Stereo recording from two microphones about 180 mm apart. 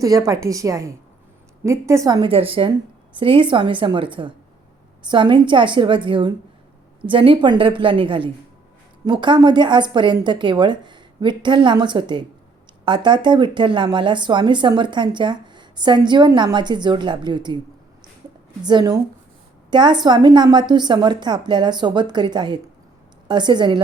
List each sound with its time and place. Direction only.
0.0 s a woman's voice: 20° right (ahead or behind)
2.3 s speech: 30° right (ahead or behind)
18.6 s speech: 25° right (ahead or behind)